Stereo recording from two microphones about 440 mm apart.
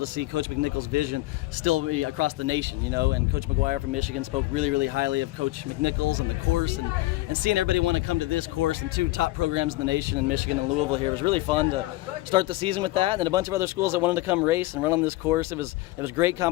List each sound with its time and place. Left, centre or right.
0.0 s speech: right
5.8 s speech: right; by 16.5 s centre